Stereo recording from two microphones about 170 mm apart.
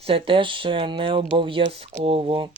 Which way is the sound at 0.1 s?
30° right (ahead or behind).